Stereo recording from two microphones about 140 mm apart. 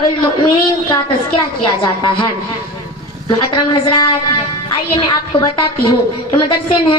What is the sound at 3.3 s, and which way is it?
A woman's voice, 35° left (ahead or behind).